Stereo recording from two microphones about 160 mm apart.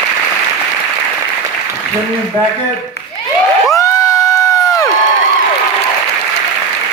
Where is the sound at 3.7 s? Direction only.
20° left (ahead or behind).